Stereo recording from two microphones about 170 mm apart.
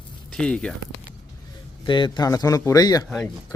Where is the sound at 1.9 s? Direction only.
30° left (ahead or behind).